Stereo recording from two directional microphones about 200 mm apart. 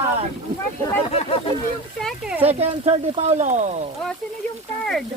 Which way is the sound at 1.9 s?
Centre (ahead or behind).